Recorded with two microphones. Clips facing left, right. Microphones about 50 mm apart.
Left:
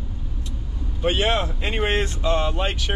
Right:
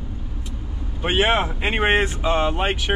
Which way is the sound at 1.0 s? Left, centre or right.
Right.